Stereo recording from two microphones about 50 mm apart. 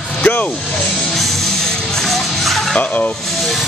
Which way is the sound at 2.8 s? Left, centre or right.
Left.